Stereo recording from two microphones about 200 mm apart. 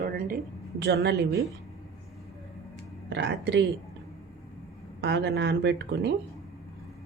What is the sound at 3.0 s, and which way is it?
Speech, 60° right (ahead or behind).